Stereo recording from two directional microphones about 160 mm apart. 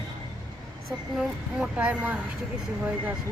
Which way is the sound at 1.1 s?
5° right (ahead or behind).